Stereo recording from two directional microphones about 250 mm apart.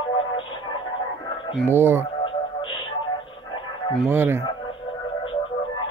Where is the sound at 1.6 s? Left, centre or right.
Centre.